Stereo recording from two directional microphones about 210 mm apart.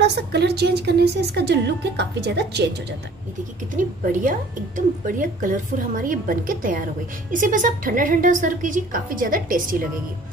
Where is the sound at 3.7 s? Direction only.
40° right (ahead or behind).